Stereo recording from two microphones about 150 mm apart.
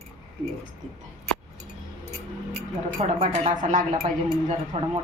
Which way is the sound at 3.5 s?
60° right (ahead or behind).